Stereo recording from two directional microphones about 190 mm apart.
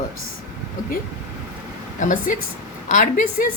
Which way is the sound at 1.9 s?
45° left (ahead or behind).